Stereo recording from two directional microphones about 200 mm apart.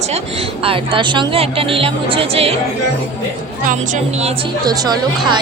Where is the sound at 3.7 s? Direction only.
40° right (ahead or behind); by 4.9 s 20° right (ahead or behind).